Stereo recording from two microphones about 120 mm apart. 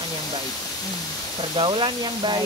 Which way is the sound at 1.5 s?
45° right (ahead or behind).